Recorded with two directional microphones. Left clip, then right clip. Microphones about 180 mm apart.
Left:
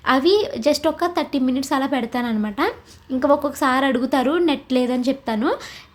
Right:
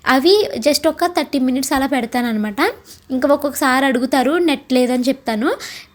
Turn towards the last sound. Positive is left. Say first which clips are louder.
# right 3 dB
turn(degrees=-15)  # may be behind; listen again after turning